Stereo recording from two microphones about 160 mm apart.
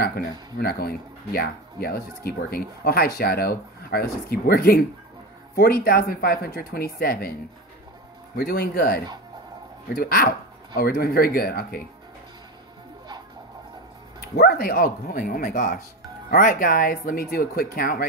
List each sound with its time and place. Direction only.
0.6 s speech: 70° left (ahead or behind)
8.4 s speech: 80° left
14.3 s speech: 85° left; by 18.0 s 65° left (ahead or behind)